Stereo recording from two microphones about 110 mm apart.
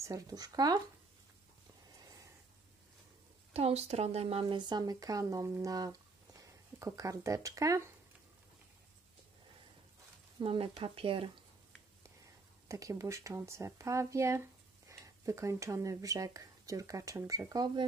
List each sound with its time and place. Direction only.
0.0 s speech: 30° right (ahead or behind)
1.9 s a sound: 35° right (ahead or behind)
3.5 s a woman's voice: 70° right (ahead or behind)
4.6 s speech: 40° right (ahead or behind)
10.4 s speech: 60° right (ahead or behind)
12.6 s speech: 30° right (ahead or behind)